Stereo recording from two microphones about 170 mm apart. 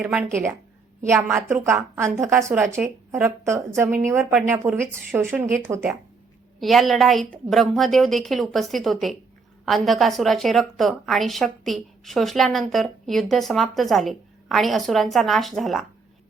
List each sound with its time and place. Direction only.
0.0 s a woman's voice: 5° right (ahead or behind)
4.2 s a woman's voice: centre (ahead or behind)
4.4 s a woman's voice: 15° right (ahead or behind)
6.6 s a woman's voice: centre (ahead or behind)